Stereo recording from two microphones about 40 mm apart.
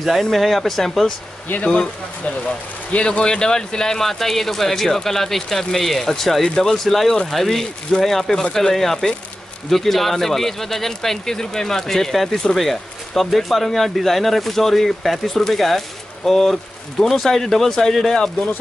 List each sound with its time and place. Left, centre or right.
0.0 s speech: centre
1.7 s speech: left; by 18.1 s centre